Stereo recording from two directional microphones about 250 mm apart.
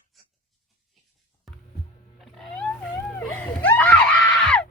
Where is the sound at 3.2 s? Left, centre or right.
Centre.